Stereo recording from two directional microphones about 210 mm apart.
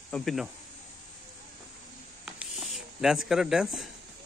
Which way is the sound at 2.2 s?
5° right (ahead or behind).